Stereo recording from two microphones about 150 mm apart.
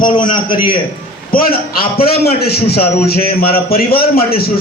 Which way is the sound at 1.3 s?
85° left.